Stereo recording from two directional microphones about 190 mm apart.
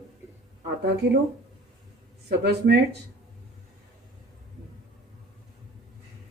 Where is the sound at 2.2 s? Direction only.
60° right (ahead or behind).